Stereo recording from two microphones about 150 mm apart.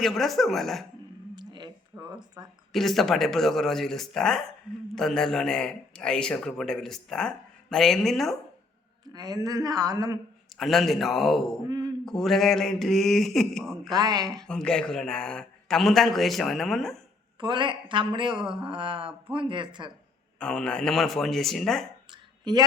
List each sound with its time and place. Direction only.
0.0 s a man's voice: centre (ahead or behind)
1.4 s a sound: 30° right (ahead or behind)
2.4 s a man's voice: 25° right (ahead or behind)
2.7 s a man's voice: centre (ahead or behind)
9.1 s a man's voice: 25° right (ahead or behind)
10.6 s a man's voice: centre (ahead or behind)
13.9 s a man's voice: 25° right (ahead or behind)
14.4 s a man's voice: 5° left (ahead or behind)
17.4 s speech: 30° right (ahead or behind)
20.4 s a man's voice: 5° left (ahead or behind)
22.1 s a sound: 30° right (ahead or behind)